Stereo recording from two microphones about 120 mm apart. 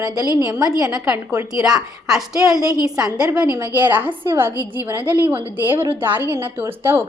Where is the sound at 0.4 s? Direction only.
30° right (ahead or behind).